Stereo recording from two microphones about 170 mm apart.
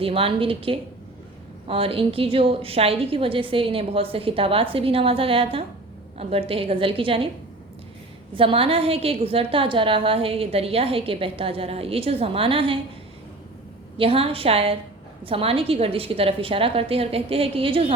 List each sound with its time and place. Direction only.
0.0 s a woman's voice: 35° right (ahead or behind)
8.4 s a woman's voice: 30° right (ahead or behind)
14.0 s a woman's voice: 35° right (ahead or behind)